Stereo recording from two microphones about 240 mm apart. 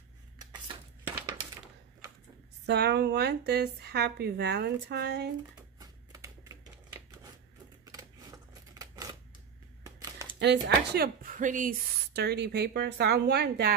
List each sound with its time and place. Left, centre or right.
2.6 s a woman's voice: right
5.8 s shuffling cards: centre
7.8 s scissors: centre
9.8 s a sound: centre
10.4 s a woman's voice: right